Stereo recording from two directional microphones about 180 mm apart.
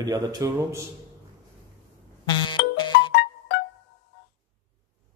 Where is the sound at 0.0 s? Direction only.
20° right (ahead or behind).